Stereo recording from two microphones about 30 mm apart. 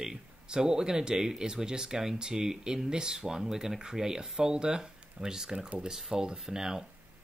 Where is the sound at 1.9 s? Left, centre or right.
Centre.